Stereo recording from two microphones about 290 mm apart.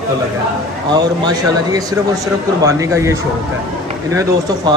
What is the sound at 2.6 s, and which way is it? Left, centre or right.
Speech, centre.